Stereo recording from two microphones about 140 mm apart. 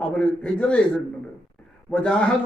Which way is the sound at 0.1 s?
5° left (ahead or behind).